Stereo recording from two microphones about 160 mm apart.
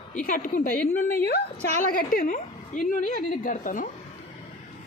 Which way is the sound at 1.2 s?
65° left (ahead or behind).